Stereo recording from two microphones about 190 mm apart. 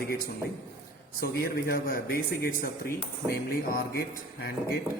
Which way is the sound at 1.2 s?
55° left (ahead or behind).